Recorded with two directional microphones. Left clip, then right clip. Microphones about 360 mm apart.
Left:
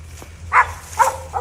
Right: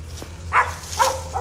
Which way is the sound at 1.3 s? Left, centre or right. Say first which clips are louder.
Left 3 dB; centre.